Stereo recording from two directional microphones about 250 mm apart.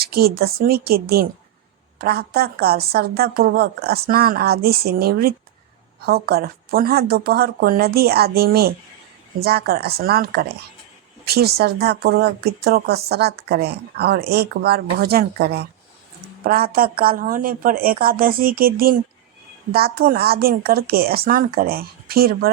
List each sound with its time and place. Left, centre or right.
0.0 s speech: right